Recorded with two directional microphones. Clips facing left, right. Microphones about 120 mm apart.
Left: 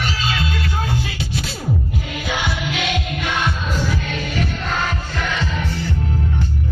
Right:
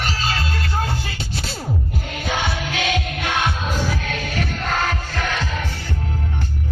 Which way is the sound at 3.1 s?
55° right (ahead or behind).